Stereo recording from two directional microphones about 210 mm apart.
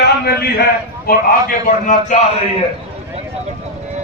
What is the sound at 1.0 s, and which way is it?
A man's voice, 45° left (ahead or behind).